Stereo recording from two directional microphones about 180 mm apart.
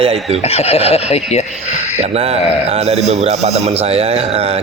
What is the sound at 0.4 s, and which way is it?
Speech, 35° left (ahead or behind).